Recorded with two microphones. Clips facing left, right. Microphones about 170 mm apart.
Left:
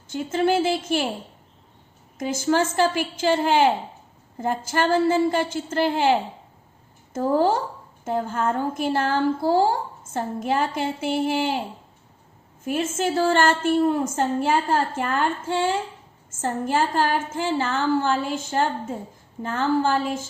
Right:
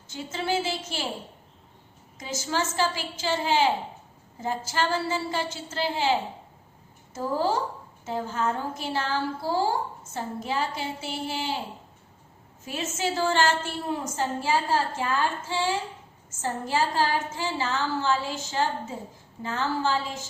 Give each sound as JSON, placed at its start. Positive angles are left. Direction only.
{"t": 0.1, "sound": "a woman's voice", "side_deg": 55}
{"t": 2.1, "sound": "a woman's voice", "side_deg": 55}
{"t": 12.6, "sound": "a woman's voice", "side_deg": 50}